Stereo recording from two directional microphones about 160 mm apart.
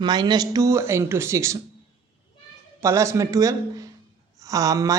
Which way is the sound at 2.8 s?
20° right (ahead or behind).